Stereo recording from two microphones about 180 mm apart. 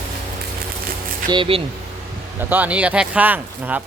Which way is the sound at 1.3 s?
30° right (ahead or behind).